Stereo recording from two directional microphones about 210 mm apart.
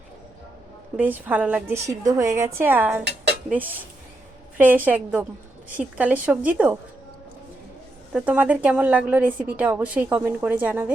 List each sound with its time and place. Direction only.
0.9 s a woman's voice: 10° right (ahead or behind)
4.5 s a woman's voice: 10° right (ahead or behind)
8.1 s a woman's voice: 5° right (ahead or behind)